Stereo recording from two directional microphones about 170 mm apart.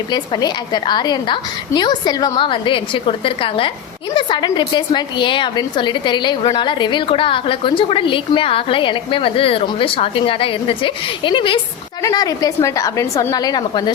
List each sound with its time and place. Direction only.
0.1 s a woman's voice: 25° left (ahead or behind)